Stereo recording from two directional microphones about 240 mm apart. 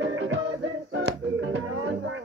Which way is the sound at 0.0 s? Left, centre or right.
Right.